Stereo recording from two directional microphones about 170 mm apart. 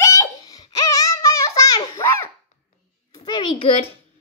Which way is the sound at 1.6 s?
20° left (ahead or behind).